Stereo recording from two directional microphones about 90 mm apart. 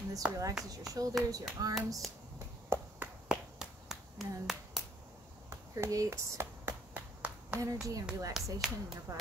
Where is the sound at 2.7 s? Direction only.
30° right (ahead or behind).